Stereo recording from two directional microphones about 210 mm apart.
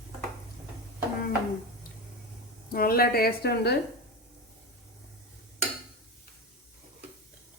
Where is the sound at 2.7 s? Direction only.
45° left (ahead or behind).